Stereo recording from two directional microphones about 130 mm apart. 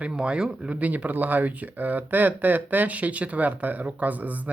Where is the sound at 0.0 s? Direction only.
10° right (ahead or behind).